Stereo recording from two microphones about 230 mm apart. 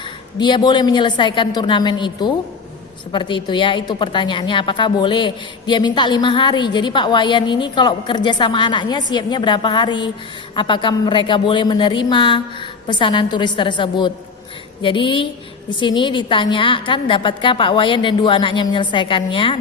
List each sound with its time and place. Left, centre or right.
0.3 s a woman's voice: centre